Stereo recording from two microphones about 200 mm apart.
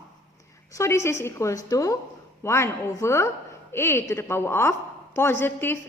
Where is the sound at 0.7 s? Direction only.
15° left (ahead or behind).